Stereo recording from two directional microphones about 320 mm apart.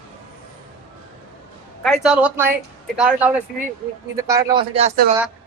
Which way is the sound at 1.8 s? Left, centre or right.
Centre.